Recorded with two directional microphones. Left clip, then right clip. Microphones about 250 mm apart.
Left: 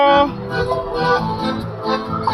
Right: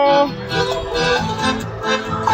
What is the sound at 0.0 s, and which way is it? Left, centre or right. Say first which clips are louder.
Music: left 1 dB; centre.